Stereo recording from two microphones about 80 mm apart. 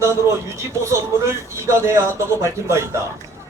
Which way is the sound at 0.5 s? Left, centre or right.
Right.